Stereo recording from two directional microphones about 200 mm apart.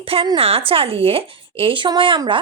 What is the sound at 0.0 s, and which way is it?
A woman's voice, 25° right (ahead or behind).